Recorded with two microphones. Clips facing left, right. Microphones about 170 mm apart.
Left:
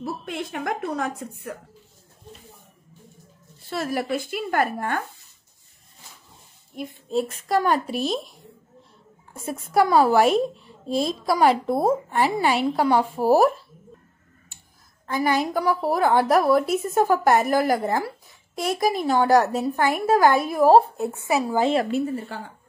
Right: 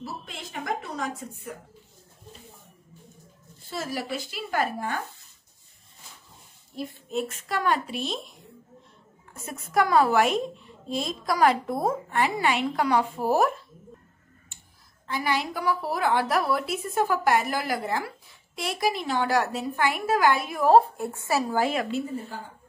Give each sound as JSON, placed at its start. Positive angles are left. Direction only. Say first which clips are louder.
{"t": 0.0, "sound": "a woman's voice", "louder": "left 8 dB", "side_deg": 55}
{"t": 3.7, "sound": "a woman's voice", "louder": "left 6 dB", "side_deg": 60}
{"t": 6.7, "sound": "a woman's voice", "louder": "left 1 dB", "side_deg": 20}
{"t": 7.1, "sound": "a woman's voice", "louder": "left 7 dB", "side_deg": 35}
{"t": 9.3, "sound": "a woman's voice", "louder": "left 4 dB", "side_deg": 30}
{"t": 15.0, "sound": "a woman's voice", "louder": "left 5 dB", "side_deg": 45}
{"t": 21.0, "sound": "a woman's voice", "louder": "left 3 dB", "side_deg": 20}
{"t": 21.9, "sound": "speech", "louder": "left 5 dB", "side_deg": 75}